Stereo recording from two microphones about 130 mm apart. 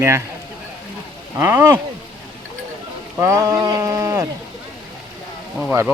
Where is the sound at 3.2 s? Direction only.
20° right (ahead or behind).